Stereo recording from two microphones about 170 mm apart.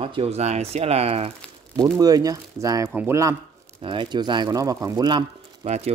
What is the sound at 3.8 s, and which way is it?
Speech, 30° right (ahead or behind).